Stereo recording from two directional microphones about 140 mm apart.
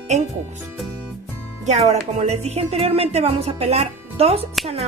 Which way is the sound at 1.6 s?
55° right (ahead or behind).